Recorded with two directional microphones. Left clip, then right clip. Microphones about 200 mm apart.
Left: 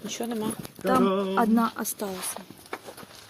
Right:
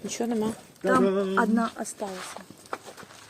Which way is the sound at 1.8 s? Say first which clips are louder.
Left 1 dB; 45° left (ahead or behind).